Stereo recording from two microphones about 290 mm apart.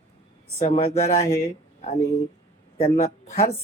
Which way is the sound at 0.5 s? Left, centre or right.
Left.